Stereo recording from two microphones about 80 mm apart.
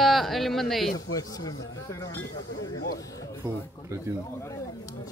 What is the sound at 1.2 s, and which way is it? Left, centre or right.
Speech, left.